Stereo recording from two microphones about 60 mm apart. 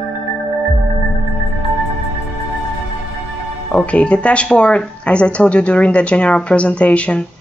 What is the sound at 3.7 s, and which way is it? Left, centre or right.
A woman's voice, left.